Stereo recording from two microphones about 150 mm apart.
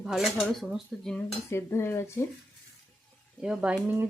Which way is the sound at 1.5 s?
15° left (ahead or behind).